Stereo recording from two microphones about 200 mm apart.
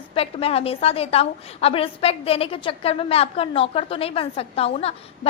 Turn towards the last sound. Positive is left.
turn(degrees=30)  # may be behind; listen again after turning